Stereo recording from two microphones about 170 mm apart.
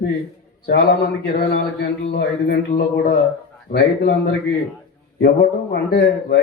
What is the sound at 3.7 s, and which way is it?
Speech, 90° left.